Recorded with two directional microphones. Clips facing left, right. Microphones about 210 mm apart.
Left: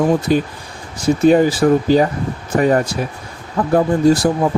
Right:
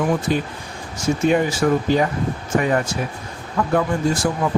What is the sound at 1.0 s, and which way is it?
Speech, 35° left (ahead or behind).